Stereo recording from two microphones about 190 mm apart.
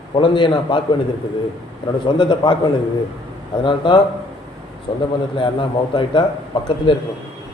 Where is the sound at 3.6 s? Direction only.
25° left (ahead or behind).